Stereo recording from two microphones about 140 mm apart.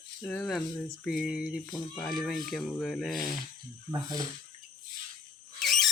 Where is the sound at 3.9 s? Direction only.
30° right (ahead or behind).